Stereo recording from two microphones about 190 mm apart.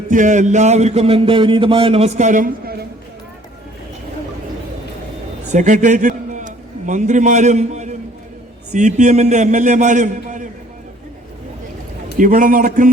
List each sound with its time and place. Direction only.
0.1 s a man's voice: 40° right (ahead or behind)
5.5 s a man's voice: 40° right (ahead or behind)
12.1 s speech: 45° right (ahead or behind)